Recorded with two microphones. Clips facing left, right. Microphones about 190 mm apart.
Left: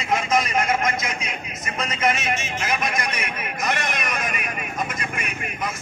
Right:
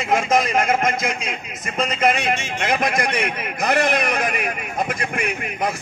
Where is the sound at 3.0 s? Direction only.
60° right (ahead or behind).